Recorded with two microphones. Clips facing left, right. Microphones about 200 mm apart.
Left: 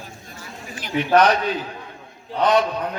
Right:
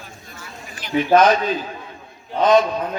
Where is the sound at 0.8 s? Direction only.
65° left (ahead or behind).